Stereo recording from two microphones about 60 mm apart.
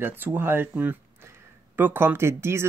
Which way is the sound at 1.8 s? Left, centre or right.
Right.